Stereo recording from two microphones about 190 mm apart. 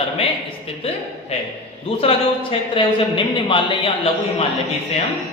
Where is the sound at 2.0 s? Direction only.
30° left (ahead or behind).